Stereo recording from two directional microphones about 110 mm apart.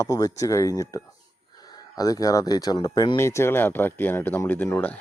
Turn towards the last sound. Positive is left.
turn(degrees=15)  # may be behind; listen again after turning